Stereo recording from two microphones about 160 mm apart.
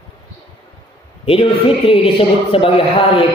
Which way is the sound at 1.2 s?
35° left (ahead or behind).